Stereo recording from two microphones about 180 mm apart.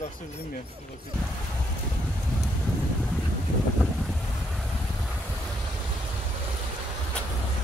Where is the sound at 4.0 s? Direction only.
Centre (ahead or behind).